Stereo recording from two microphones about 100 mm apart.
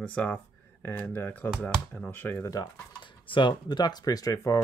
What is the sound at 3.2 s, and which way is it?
Speech, 55° left (ahead or behind).